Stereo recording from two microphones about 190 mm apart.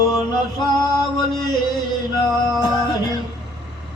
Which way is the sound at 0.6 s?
20° left (ahead or behind).